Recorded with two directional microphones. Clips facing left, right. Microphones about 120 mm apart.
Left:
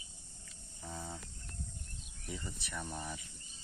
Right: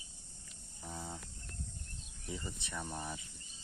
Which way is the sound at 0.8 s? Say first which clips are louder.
Even; 15° right (ahead or behind).